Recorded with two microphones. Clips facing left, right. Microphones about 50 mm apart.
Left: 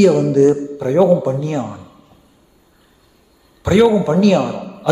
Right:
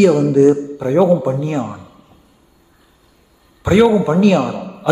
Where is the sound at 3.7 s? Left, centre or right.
Centre.